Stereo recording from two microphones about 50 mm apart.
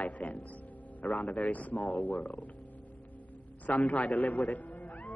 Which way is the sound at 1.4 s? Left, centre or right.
Left.